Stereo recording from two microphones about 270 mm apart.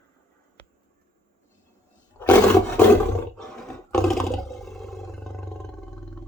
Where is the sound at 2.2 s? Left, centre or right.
Centre.